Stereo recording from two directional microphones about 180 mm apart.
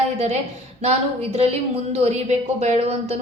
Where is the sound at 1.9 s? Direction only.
35° right (ahead or behind).